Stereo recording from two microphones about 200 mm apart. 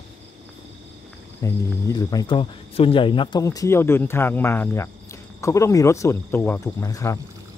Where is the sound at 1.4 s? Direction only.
15° left (ahead or behind).